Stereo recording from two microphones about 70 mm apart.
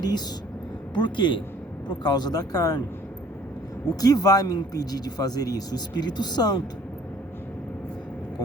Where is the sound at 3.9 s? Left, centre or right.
Left.